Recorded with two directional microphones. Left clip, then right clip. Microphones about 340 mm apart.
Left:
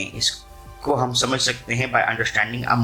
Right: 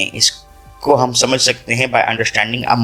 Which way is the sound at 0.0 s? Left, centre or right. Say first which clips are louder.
Right 8 dB; right.